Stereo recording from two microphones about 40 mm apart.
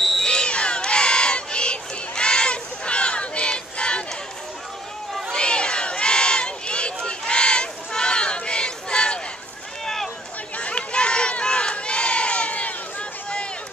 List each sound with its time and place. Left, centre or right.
0.2 s crowd: left
5.3 s crowd: left
7.1 s a sound: left
10.6 s crowd: left